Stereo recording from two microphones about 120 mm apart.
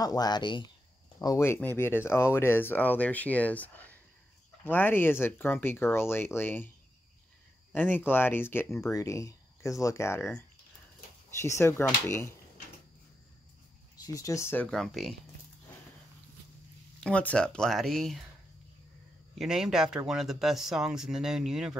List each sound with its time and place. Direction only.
0.0 s speech: 30° left (ahead or behind)
1.2 s speech: 25° left (ahead or behind)
7.7 s speech: 15° left (ahead or behind)
11.4 s speech: 25° left (ahead or behind)
14.0 s speech: 30° left (ahead or behind)
14.7 s speech: centre (ahead or behind)
17.0 s speech: 10° left (ahead or behind)
19.3 s speech: 5° right (ahead or behind)